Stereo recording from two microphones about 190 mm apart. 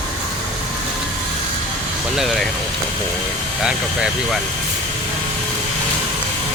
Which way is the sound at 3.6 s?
5° right (ahead or behind).